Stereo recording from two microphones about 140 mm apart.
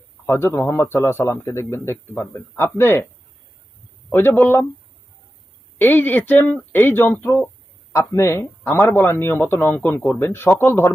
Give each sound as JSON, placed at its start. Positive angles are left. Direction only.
{"t": 0.3, "sound": "a man's voice", "side_deg": 20}
{"t": 4.1, "sound": "a man's voice", "side_deg": 15}
{"t": 5.8, "sound": "a man's voice", "side_deg": 15}